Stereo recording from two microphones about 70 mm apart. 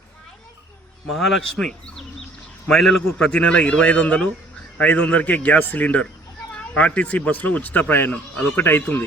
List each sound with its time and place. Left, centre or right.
1.0 s a man's voice: centre; by 9.0 s left